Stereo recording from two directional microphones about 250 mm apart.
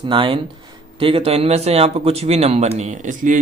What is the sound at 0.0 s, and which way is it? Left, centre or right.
A man's voice, centre.